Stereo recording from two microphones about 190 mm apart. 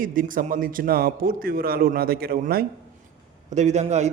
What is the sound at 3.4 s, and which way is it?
Speech, 35° right (ahead or behind).